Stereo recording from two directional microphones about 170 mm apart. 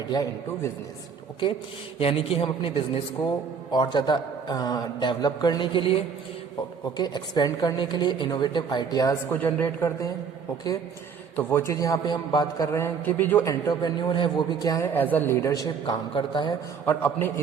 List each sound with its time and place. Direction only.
0.1 s a man's voice: 20° left (ahead or behind)
2.0 s a man's voice: 35° left (ahead or behind); by 10.1 s 15° left (ahead or behind)
11.3 s a man's voice: 15° left (ahead or behind)
14.9 s a man's voice: 10° left (ahead or behind); by 16.6 s 25° left (ahead or behind)
16.8 s a man's voice: 10° left (ahead or behind)